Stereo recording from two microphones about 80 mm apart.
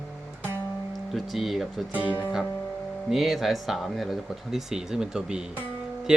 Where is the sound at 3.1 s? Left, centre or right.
Centre.